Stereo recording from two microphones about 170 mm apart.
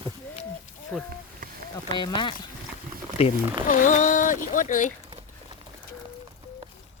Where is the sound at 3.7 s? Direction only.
50° left (ahead or behind).